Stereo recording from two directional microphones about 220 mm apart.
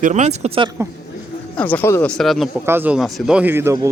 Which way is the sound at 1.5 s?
5° left (ahead or behind).